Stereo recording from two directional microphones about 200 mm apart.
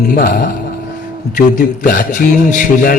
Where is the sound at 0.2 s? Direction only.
45° left (ahead or behind).